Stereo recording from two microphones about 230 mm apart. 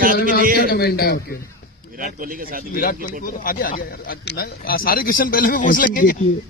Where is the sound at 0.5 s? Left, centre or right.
Left.